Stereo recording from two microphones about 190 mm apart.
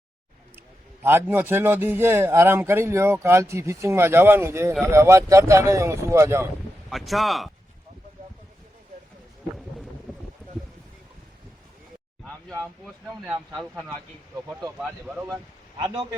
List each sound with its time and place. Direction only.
1.0 s a man's voice: 10° right (ahead or behind)
6.9 s speech: centre (ahead or behind)
13.2 s a man's voice: 10° right (ahead or behind)
13.6 s speech: 5° left (ahead or behind)
15.8 s speech: 20° right (ahead or behind)